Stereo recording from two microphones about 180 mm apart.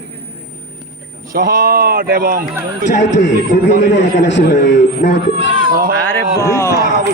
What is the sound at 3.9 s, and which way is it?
Speech, 75° left (ahead or behind).